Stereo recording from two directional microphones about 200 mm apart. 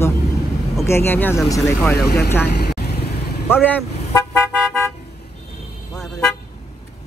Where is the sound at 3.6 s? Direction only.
10° left (ahead or behind).